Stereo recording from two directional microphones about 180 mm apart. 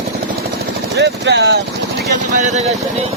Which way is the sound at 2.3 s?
40° right (ahead or behind).